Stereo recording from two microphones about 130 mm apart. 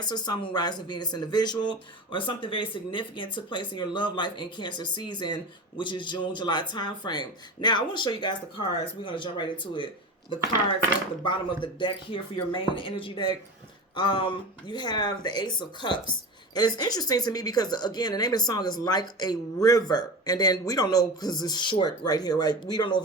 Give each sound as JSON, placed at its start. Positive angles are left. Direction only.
{"t": 0.0, "sound": "speech", "side_deg": 35}
{"t": 11.2, "sound": "speech", "side_deg": 40}